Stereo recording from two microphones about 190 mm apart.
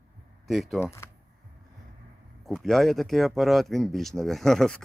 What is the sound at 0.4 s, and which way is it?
Speech, centre (ahead or behind).